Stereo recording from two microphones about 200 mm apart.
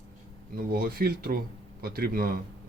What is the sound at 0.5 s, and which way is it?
Speech, 45° right (ahead or behind).